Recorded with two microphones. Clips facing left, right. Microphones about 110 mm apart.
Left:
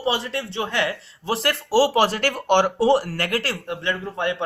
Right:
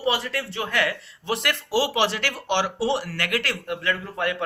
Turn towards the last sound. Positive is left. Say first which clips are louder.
# left 1 dB
turn(degrees=25)  # may be behind; listen again after turning